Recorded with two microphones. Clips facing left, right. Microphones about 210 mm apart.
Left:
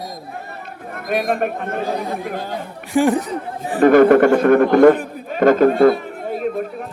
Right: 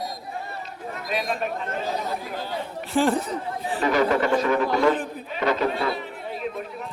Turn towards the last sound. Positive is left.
turn(degrees=50)  # may be behind; listen again after turning